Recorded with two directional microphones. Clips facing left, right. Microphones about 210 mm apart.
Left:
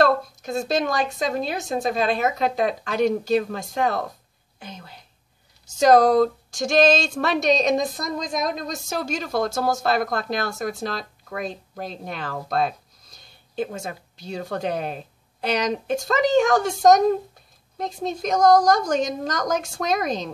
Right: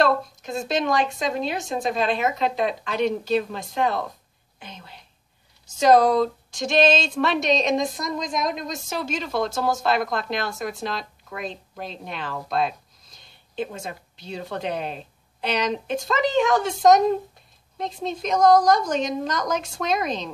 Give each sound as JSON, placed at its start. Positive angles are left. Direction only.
{"t": 0.0, "sound": "a woman's voice", "side_deg": 40}
{"t": 6.6, "sound": "a woman's voice", "side_deg": 40}